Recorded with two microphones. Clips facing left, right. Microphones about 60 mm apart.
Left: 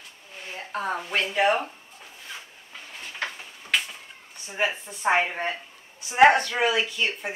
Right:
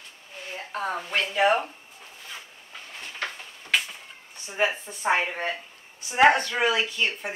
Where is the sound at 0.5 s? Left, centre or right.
Centre.